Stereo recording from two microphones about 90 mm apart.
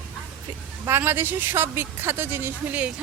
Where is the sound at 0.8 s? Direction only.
25° right (ahead or behind).